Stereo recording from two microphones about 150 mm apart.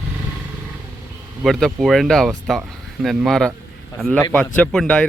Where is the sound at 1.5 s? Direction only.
Centre (ahead or behind).